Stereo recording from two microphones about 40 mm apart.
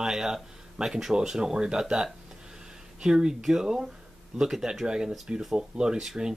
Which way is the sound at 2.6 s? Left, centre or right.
Centre.